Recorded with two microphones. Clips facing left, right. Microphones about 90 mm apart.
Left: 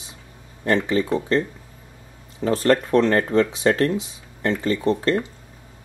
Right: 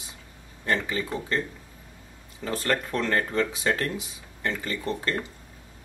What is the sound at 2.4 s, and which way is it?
Speech, 30° left (ahead or behind).